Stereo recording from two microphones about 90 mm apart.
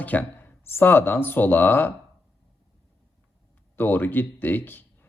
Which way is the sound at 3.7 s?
20° left (ahead or behind).